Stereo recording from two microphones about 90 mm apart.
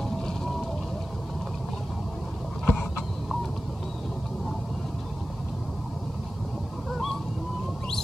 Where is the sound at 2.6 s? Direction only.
20° left (ahead or behind).